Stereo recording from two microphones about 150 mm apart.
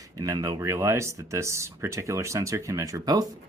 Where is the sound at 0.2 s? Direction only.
25° right (ahead or behind).